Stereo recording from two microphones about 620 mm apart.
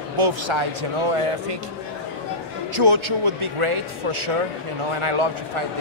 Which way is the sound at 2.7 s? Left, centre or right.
Right.